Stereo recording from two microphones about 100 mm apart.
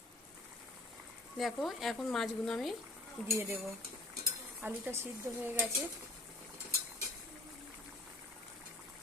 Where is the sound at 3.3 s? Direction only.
25° right (ahead or behind).